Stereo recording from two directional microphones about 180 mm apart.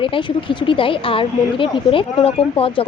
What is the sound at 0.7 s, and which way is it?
Speech, 30° left (ahead or behind).